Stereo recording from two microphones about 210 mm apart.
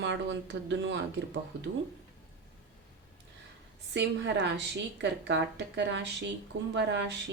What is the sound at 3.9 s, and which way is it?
Speech, 55° right (ahead or behind).